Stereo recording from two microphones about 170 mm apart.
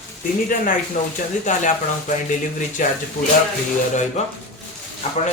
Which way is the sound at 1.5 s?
45° left (ahead or behind).